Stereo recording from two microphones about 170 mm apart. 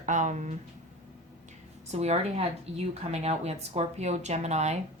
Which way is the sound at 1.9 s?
40° right (ahead or behind).